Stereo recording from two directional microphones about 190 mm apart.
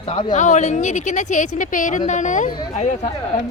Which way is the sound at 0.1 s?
25° left (ahead or behind).